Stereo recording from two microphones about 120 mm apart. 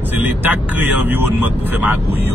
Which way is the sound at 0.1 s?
15° right (ahead or behind).